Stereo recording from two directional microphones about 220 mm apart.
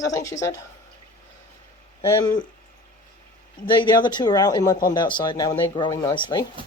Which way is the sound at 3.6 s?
20° left (ahead or behind).